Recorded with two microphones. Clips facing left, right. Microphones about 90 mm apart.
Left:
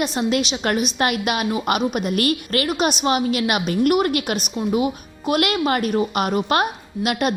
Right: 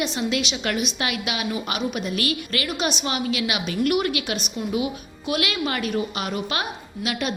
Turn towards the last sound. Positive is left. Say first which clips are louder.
# left 6 dB
turn(degrees=50)  # may be behind; listen again after turning